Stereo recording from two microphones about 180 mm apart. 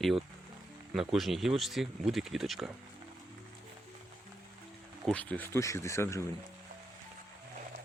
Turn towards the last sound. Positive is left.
turn(degrees=15)  # may be behind; listen again after turning